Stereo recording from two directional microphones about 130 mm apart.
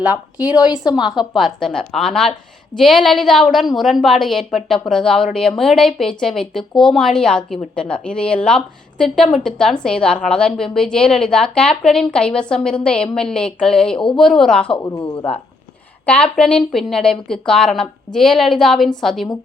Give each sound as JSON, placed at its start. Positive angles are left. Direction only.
{"t": 0.0, "sound": "a woman's voice", "side_deg": -10}
{"t": 14.8, "sound": "speech", "side_deg": 25}
{"t": 16.0, "sound": "a woman's voice", "side_deg": 10}